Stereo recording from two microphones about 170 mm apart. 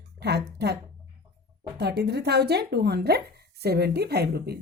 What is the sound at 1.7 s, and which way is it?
Speech, 70° right (ahead or behind).